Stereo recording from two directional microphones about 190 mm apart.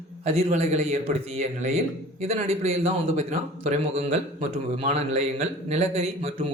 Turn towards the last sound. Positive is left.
turn(degrees=-30)  # may be behind; listen again after turning